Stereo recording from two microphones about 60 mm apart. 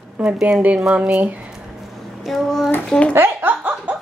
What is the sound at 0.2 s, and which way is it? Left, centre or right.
A woman's voice, right.